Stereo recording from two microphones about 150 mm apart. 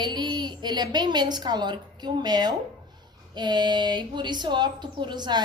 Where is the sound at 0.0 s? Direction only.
30° right (ahead or behind).